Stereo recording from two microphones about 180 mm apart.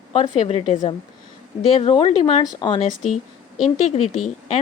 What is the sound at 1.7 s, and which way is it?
A woman's voice, 30° left (ahead or behind).